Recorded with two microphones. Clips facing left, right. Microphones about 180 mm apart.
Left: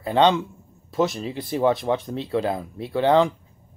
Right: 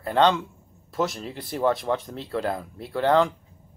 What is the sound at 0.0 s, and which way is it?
Speech, 15° left (ahead or behind).